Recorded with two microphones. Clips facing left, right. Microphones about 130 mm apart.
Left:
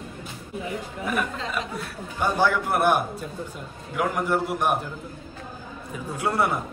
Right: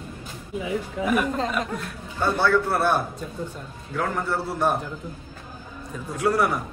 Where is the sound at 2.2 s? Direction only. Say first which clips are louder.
Right 1 dB; 15° left (ahead or behind).